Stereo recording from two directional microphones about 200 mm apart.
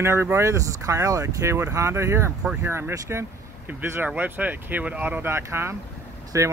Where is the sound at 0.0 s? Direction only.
10° right (ahead or behind).